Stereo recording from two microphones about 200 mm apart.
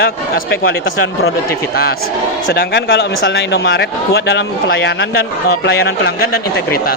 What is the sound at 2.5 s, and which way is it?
A man's voice, 60° left (ahead or behind).